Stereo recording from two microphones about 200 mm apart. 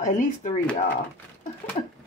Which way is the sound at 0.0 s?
40° left (ahead or behind).